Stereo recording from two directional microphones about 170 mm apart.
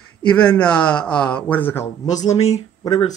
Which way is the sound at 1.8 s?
45° left (ahead or behind).